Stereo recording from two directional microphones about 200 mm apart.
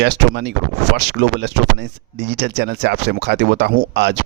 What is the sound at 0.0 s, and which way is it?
A man's voice, 60° right (ahead or behind).